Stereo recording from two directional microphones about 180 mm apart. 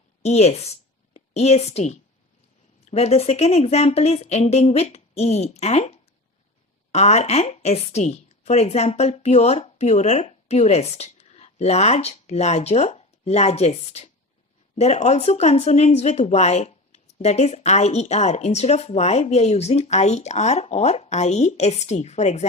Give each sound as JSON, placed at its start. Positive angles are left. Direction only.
{"t": 0.2, "sound": "a woman's voice", "side_deg": 35}